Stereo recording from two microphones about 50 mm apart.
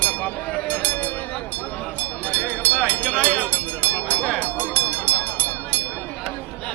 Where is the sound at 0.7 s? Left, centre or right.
Left.